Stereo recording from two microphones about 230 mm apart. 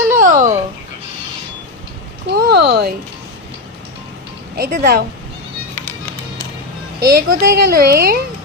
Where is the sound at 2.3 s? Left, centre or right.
Right.